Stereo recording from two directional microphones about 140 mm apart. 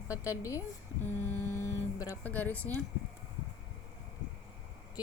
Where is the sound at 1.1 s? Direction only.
15° left (ahead or behind).